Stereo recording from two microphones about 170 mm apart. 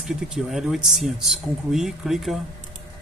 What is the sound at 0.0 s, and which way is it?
Speech, 5° right (ahead or behind).